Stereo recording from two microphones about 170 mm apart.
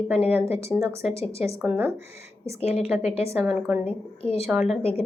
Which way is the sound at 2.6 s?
35° left (ahead or behind).